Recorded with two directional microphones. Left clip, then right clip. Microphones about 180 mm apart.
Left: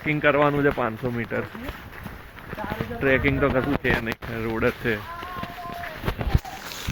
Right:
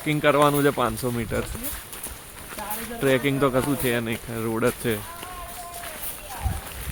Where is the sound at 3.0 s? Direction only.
25° right (ahead or behind).